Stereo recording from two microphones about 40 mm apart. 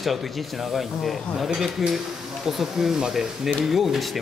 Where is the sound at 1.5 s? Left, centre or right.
Centre.